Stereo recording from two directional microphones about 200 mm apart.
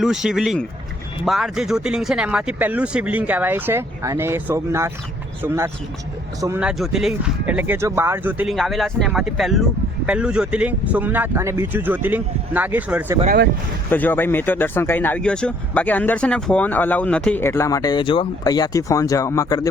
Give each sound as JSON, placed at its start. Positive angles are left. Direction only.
{"t": 0.0, "sound": "speech", "side_deg": 0}
{"t": 13.2, "sound": "speech", "side_deg": -50}
{"t": 13.9, "sound": "speech", "side_deg": 10}